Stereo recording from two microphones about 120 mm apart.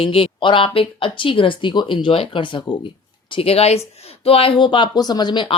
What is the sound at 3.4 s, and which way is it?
Speech, 55° left (ahead or behind).